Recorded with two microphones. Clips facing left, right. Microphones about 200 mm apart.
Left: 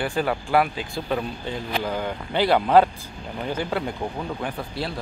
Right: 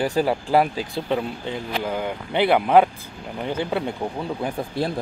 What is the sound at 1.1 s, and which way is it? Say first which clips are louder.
Speech: right 2 dB; 20° right (ahead or behind).